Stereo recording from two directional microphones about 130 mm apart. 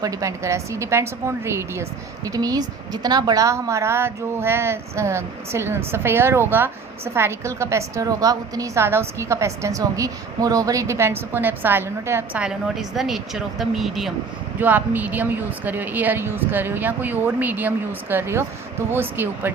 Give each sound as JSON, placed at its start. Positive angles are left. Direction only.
{"t": 0.0, "sound": "a woman's voice", "side_deg": -25}
{"t": 12.4, "sound": "speech", "side_deg": -5}
{"t": 14.6, "sound": "a woman's voice", "side_deg": -15}